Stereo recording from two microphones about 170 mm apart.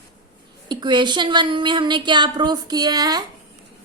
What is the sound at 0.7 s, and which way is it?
A woman's voice, 25° right (ahead or behind).